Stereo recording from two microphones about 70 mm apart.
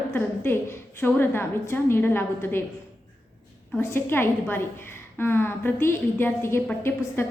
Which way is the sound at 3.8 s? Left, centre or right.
Left.